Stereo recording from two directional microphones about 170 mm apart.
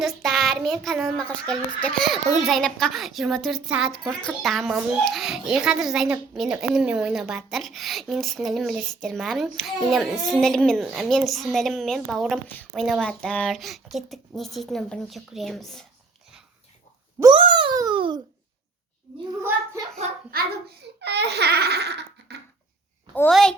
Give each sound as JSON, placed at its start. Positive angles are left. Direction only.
{"t": 0.0, "sound": "a child's voice", "side_deg": 0}
{"t": 17.3, "sound": "a sound", "side_deg": -30}
{"t": 19.4, "sound": "a child's voice", "side_deg": -15}
{"t": 20.3, "sound": "a child's voice", "side_deg": -60}
{"t": 21.0, "sound": "babbling", "side_deg": -80}
{"t": 23.3, "sound": "a child's voice", "side_deg": 5}